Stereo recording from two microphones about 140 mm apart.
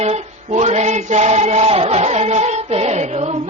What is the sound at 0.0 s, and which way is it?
Choir, 50° right (ahead or behind).